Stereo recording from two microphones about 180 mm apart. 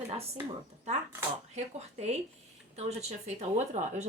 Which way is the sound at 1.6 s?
35° right (ahead or behind).